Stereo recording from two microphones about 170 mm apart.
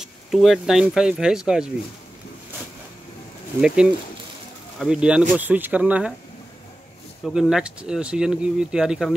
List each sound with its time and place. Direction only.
0.0 s speech: centre (ahead or behind)
3.6 s speech: 5° right (ahead or behind)
7.2 s speech: 5° right (ahead or behind)